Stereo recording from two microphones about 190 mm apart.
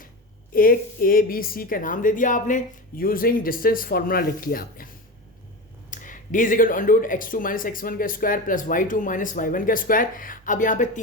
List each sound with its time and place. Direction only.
0.5 s speech: 50° left (ahead or behind)
5.9 s speech: 45° left (ahead or behind)